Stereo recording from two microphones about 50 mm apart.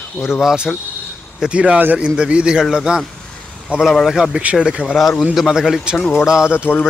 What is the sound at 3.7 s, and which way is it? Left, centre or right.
Speech, right.